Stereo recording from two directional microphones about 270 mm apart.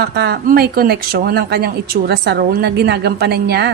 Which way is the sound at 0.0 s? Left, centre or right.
Right.